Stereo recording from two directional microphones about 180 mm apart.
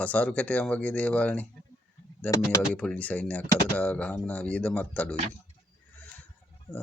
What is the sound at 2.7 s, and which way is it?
Speech, 5° left (ahead or behind).